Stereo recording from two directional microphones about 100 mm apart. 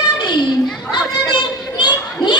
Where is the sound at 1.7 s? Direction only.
50° left (ahead or behind).